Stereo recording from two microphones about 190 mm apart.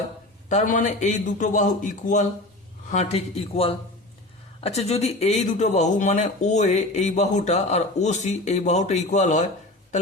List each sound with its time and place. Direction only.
0.4 s speech: 40° left (ahead or behind)